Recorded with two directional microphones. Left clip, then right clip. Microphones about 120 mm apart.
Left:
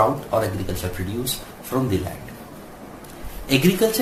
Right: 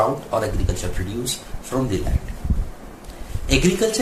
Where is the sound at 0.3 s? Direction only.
20° right (ahead or behind).